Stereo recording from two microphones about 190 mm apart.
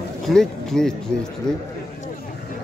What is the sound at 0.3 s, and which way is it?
Speech, centre (ahead or behind).